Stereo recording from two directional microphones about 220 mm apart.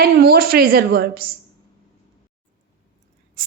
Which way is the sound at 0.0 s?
45° right (ahead or behind).